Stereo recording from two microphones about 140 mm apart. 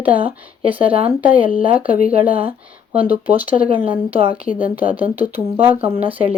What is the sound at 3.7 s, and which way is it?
Speech, 40° right (ahead or behind).